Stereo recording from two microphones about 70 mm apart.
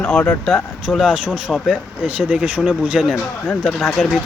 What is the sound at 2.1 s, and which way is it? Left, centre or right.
Speech, right.